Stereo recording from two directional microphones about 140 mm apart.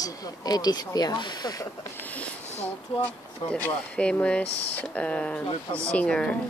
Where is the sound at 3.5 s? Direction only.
10° left (ahead or behind).